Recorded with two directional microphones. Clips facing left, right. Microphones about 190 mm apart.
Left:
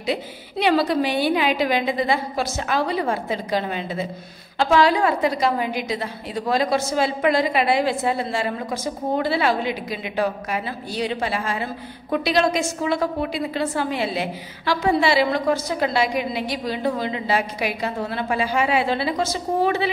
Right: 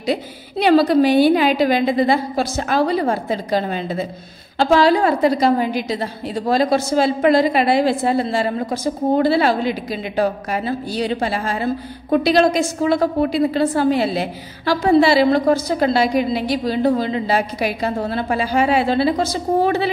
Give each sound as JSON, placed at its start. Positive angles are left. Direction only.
{"t": 0.0, "sound": "a woman's voice", "side_deg": -40}